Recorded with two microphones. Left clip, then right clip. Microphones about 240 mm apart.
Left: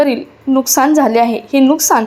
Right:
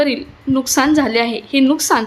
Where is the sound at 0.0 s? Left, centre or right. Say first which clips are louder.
Left 4 dB; centre.